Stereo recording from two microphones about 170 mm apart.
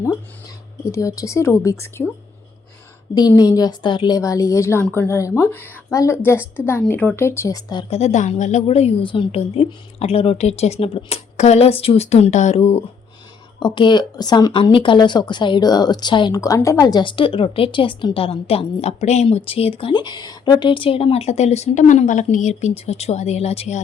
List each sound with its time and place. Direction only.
0.9 s a woman's voice: 15° left (ahead or behind)
3.2 s a woman's voice: 20° left (ahead or behind)
7.9 s a woman's voice: 40° left (ahead or behind)
13.6 s a woman's voice: 25° left (ahead or behind)